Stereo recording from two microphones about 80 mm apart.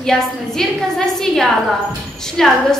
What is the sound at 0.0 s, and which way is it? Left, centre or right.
A woman's voice, centre.